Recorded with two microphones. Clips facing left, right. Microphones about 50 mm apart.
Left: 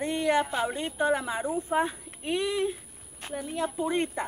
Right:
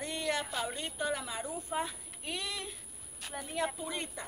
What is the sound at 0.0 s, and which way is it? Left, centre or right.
Speech, left.